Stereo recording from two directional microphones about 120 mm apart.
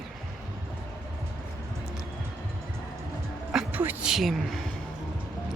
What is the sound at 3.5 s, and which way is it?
Music, 5° right (ahead or behind).